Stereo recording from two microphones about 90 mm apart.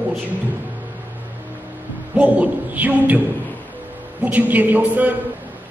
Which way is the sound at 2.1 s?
15° right (ahead or behind).